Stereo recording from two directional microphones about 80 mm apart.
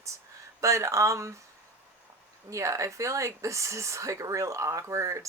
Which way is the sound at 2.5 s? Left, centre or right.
Right.